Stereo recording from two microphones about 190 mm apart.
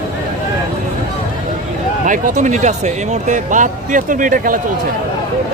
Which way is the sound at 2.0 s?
40° right (ahead or behind).